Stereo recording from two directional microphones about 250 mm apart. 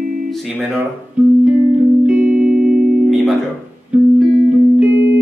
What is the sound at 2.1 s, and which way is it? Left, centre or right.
Music, centre.